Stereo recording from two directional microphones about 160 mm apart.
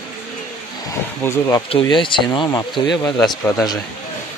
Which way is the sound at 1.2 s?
20° left (ahead or behind).